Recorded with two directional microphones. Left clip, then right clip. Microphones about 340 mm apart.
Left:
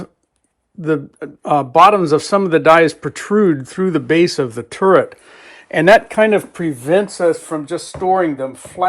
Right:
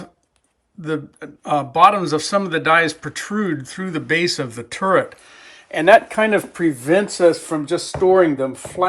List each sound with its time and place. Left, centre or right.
0.8 s speech: centre
5.7 s speech: left
7.3 s speech: centre